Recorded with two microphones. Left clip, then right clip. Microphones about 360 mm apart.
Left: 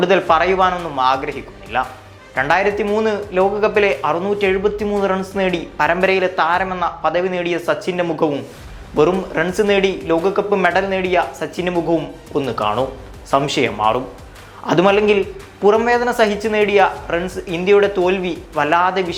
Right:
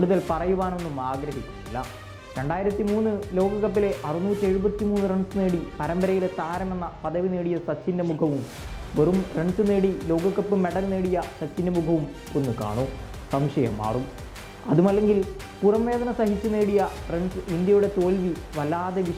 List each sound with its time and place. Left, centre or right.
0.0 s speech: centre
2.3 s speech: centre
8.0 s speech: left